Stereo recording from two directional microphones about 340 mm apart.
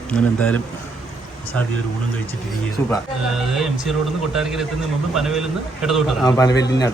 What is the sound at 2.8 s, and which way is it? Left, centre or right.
Speech, centre.